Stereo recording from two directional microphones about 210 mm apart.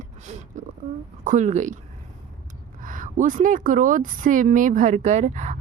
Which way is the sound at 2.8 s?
40° right (ahead or behind).